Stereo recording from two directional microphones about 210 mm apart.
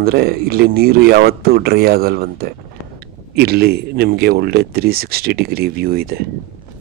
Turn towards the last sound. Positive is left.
turn(degrees=-45)  # may be behind; listen again after turning